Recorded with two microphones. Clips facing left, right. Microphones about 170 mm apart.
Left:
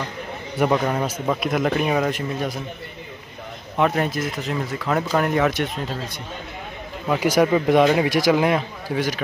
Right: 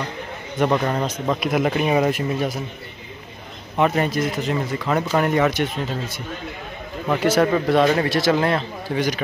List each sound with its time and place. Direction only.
0.6 s a man's voice: 5° left (ahead or behind)
3.7 s a man's voice: centre (ahead or behind)
7.1 s speech: 10° left (ahead or behind)